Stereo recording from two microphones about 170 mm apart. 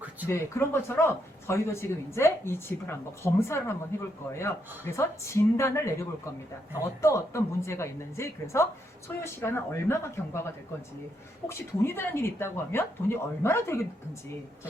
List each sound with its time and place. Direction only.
0.3 s speech: 15° left (ahead or behind)